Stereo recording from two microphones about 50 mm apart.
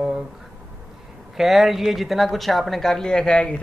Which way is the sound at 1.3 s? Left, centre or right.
Centre.